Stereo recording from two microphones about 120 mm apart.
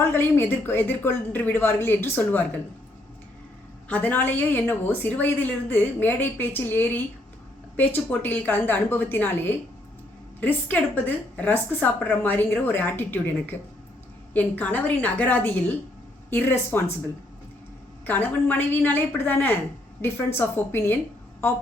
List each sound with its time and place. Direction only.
0.1 s speech: 20° left (ahead or behind)
3.8 s a woman's voice: 15° left (ahead or behind)
18.0 s a woman's voice: 15° left (ahead or behind)